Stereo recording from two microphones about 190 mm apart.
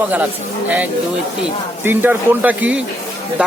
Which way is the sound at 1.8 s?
10° right (ahead or behind).